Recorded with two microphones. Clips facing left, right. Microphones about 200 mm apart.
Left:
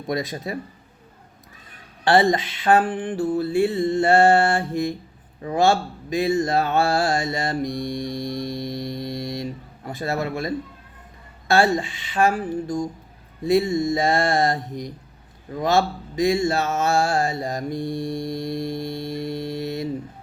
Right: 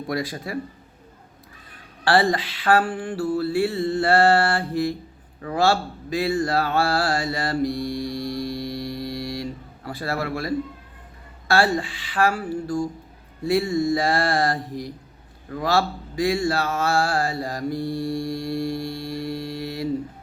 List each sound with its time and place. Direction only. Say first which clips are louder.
0.1 s speech: left 2 dB; 20° left (ahead or behind)
2.0 s speech: left 2 dB; 20° left (ahead or behind)